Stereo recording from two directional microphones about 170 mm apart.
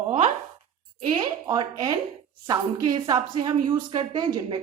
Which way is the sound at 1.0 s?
30° right (ahead or behind).